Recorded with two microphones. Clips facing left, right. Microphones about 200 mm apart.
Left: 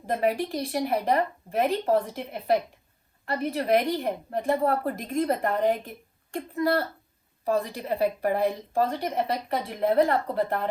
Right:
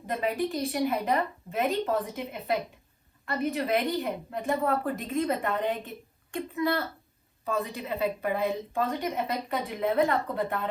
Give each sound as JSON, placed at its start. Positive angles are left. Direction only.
{"t": 0.3, "sound": "a woman's voice", "side_deg": 35}